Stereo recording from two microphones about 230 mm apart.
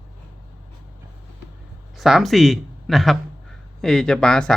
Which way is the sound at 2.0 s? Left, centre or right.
Centre.